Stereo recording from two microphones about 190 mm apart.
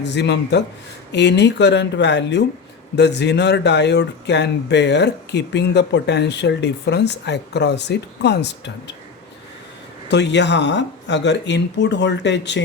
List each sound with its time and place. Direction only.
0.0 s speech: 65° left (ahead or behind)
10.1 s speech: 65° left (ahead or behind)